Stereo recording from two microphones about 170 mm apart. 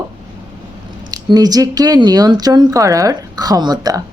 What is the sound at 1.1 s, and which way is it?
Speech, 25° right (ahead or behind).